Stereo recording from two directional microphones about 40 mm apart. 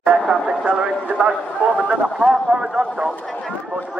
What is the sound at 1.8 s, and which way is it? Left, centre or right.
Speech, right.